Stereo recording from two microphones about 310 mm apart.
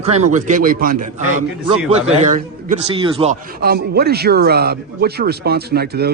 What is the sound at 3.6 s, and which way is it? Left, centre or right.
A man's voice, right.